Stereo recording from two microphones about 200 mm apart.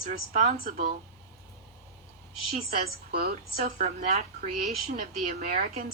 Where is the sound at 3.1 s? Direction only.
50° right (ahead or behind).